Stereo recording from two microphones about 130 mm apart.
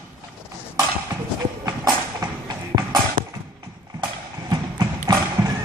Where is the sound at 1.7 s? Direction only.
30° right (ahead or behind).